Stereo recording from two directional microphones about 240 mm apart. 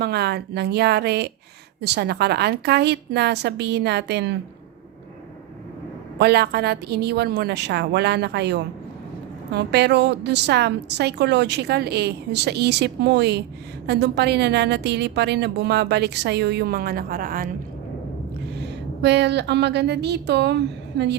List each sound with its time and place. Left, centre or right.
0.0 s a woman's voice: right
6.1 s a woman's voice: right
18.6 s a woman's voice: right